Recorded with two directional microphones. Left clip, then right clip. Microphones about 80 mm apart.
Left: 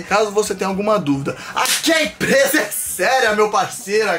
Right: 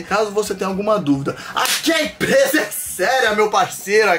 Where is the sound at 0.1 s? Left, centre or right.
Centre.